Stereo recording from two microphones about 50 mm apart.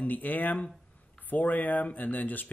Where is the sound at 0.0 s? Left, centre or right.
Left.